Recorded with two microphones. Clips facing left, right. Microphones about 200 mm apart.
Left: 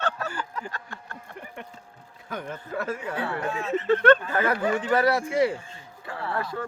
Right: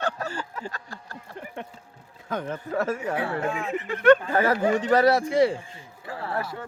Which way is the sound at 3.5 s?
15° right (ahead or behind).